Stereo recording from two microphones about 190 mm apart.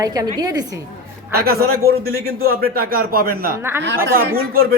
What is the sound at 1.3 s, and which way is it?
A man's voice, 55° right (ahead or behind).